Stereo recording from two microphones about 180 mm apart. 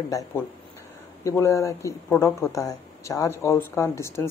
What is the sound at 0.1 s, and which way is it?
Speech, 20° left (ahead or behind).